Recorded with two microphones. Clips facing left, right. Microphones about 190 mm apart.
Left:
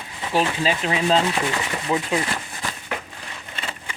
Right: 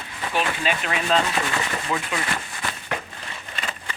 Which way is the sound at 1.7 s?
20° left (ahead or behind).